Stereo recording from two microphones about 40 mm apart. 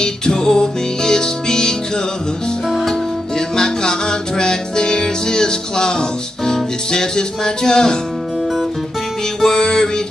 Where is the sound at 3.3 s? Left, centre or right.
Centre.